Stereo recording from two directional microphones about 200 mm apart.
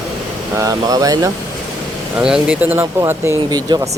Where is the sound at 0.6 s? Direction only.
15° right (ahead or behind).